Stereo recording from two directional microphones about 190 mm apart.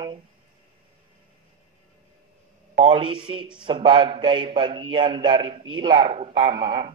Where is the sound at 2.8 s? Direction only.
30° right (ahead or behind).